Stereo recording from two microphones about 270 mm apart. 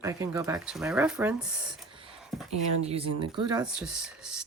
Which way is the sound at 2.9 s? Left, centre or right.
Centre.